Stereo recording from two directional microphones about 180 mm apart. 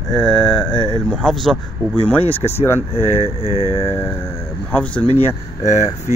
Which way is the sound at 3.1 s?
35° left (ahead or behind).